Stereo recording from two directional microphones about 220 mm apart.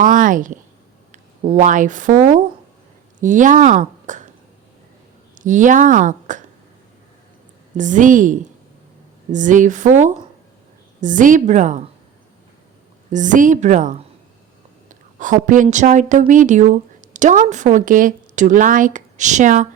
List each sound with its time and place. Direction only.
0.0 s a woman's voice: 35° right (ahead or behind)
5.3 s speech: 35° right (ahead or behind)
7.8 s a woman's voice: 35° right (ahead or behind)
13.1 s a woman's voice: 35° right (ahead or behind)